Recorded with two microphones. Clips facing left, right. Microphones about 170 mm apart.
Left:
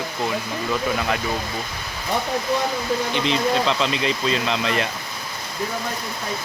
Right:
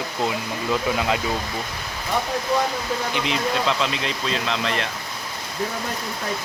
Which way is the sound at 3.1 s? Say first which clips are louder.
Left 3 dB; 5° right (ahead or behind).